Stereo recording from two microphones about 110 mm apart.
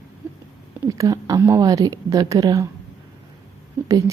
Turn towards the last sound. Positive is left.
turn(degrees=-30)  # may be behind; listen again after turning